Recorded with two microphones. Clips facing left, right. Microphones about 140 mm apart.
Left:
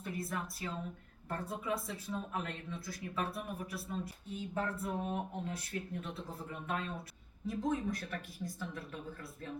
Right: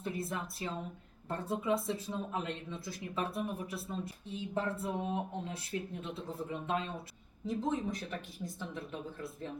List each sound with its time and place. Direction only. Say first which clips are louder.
0.0 s speech: right 2 dB; 25° right (ahead or behind)